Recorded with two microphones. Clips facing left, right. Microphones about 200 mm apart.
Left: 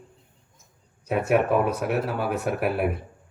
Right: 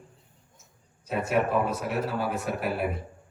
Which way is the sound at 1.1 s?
60° left (ahead or behind).